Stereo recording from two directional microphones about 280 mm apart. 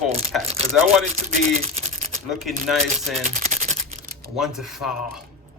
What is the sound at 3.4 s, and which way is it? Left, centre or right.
Typing, right.